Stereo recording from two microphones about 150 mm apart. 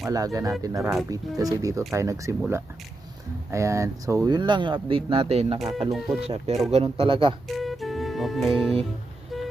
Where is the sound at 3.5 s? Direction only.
20° right (ahead or behind); by 5.6 s 40° right (ahead or behind).